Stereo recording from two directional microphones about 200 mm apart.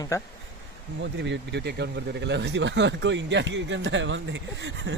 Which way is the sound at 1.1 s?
60° right (ahead or behind).